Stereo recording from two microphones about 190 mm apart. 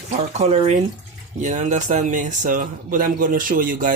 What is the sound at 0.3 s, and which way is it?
Speech, 35° right (ahead or behind).